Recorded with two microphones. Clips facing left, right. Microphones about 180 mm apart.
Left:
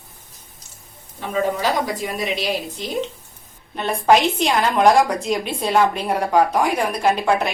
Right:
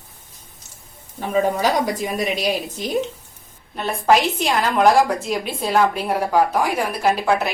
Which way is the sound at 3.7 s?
Centre (ahead or behind).